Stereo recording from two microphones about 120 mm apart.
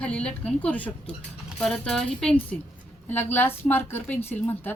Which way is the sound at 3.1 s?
15° left (ahead or behind).